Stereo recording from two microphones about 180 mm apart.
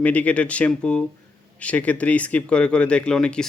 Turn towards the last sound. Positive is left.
turn(degrees=5)  # may be behind; listen again after turning